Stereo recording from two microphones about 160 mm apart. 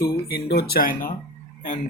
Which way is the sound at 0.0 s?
75° left (ahead or behind).